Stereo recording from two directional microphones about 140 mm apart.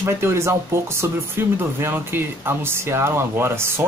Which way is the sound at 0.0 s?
20° right (ahead or behind).